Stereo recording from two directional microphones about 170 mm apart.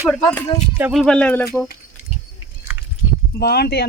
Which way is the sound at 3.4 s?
70° left (ahead or behind).